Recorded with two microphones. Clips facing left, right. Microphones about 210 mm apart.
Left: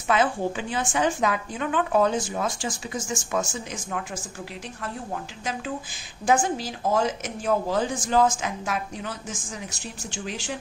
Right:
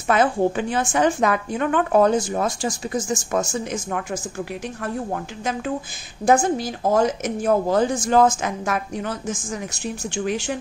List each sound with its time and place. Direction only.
0.1 s a woman's voice: 50° right (ahead or behind)
4.8 s a woman's voice: 55° right (ahead or behind)
6.2 s a woman's voice: 40° right (ahead or behind)
10.1 s a woman's voice: 55° right (ahead or behind)